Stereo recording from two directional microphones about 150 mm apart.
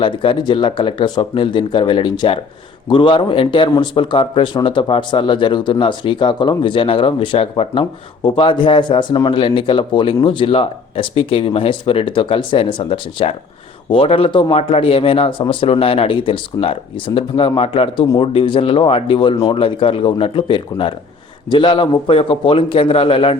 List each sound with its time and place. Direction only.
0.0 s speech: 35° left (ahead or behind)